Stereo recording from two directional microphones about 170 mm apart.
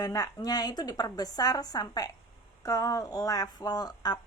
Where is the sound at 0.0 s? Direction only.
20° left (ahead or behind).